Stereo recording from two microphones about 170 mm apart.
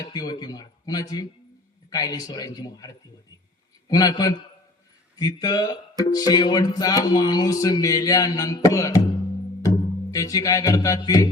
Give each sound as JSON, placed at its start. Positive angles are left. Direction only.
{"t": 0.0, "sound": "music", "side_deg": 25}
{"t": 9.6, "sound": "speech", "side_deg": 20}